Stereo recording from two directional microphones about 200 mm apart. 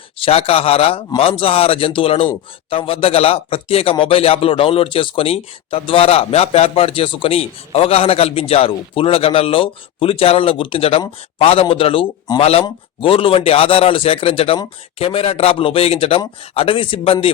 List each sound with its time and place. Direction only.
0.2 s a man's voice: 30° left (ahead or behind)